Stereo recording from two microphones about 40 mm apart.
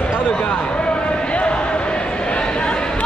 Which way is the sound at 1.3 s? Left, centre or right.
Left.